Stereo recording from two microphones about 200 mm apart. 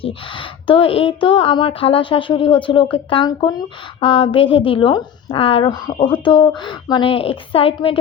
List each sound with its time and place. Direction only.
0.0 s speech: 25° left (ahead or behind)